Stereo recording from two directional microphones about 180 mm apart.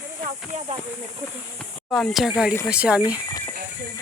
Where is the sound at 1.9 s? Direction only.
Centre (ahead or behind).